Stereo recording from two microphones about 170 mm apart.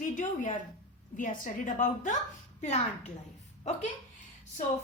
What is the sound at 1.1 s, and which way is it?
A woman's voice, 50° left (ahead or behind).